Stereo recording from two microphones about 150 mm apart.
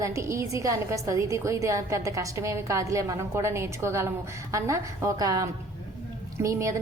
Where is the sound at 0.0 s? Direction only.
20° right (ahead or behind).